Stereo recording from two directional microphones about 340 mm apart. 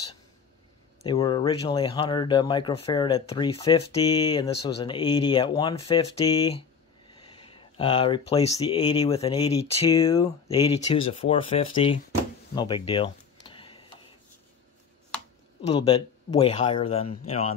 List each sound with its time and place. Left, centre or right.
1.0 s speech: centre
12.5 s a sound: centre
15.7 s speech: centre